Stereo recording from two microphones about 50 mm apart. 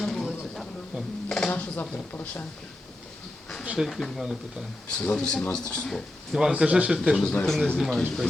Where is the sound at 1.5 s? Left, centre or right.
Left.